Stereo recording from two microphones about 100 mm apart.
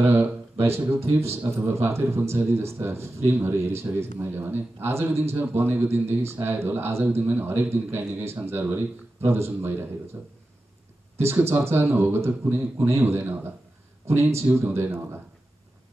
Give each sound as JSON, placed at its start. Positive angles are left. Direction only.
{"t": 0.0, "sound": "a man's voice", "side_deg": -20}
{"t": 11.1, "sound": "a man's voice", "side_deg": -25}